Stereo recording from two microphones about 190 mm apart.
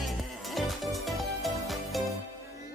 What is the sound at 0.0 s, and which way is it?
Music, centre (ahead or behind).